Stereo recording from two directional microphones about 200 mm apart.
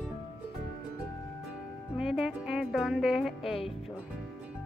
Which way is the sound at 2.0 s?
5° right (ahead or behind).